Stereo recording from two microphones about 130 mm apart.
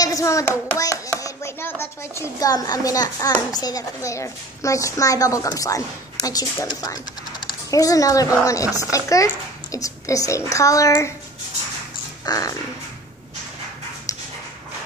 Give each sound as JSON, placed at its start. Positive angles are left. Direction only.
{"t": 0.0, "sound": "hands", "side_deg": 25}
{"t": 0.7, "sound": "a child's voice", "side_deg": 25}
{"t": 12.3, "sound": "a child's voice", "side_deg": 25}